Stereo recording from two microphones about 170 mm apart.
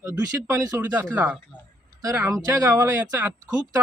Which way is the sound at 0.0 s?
20° right (ahead or behind).